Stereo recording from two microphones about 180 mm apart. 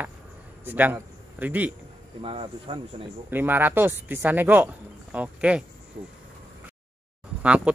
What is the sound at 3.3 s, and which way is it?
Speech, 10° right (ahead or behind).